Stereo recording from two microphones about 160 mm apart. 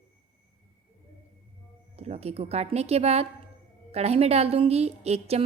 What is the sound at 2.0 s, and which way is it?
A woman's voice, 40° right (ahead or behind).